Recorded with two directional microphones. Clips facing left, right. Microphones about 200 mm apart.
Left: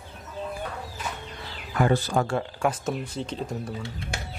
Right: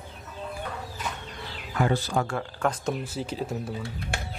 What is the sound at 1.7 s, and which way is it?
Speech, 55° left (ahead or behind).